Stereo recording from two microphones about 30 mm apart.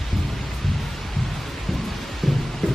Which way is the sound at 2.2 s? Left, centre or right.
Centre.